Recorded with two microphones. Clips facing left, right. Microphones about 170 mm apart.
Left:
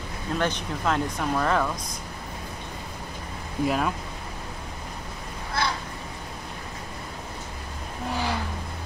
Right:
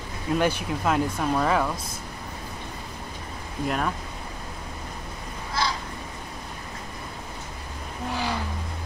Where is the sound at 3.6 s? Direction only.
5° left (ahead or behind).